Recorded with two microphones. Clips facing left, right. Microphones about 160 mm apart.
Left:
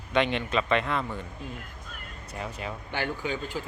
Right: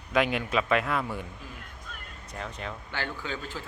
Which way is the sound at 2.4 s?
5° left (ahead or behind).